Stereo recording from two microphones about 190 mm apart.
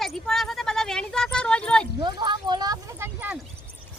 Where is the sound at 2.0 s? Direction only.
25° right (ahead or behind); by 3.4 s 5° right (ahead or behind).